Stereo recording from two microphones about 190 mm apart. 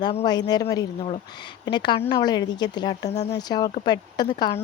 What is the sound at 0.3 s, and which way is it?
Speech, 20° left (ahead or behind).